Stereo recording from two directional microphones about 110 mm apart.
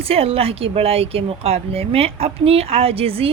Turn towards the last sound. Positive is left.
turn(degrees=-60)  # may be behind; listen again after turning